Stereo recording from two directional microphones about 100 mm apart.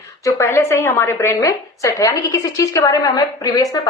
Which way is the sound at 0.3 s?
25° left (ahead or behind).